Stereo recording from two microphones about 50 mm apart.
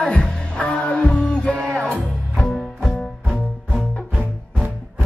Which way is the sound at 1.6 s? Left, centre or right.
Centre.